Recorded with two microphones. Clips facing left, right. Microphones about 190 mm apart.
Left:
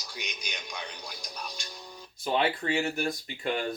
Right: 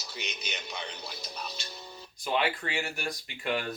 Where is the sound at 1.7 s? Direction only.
5° right (ahead or behind).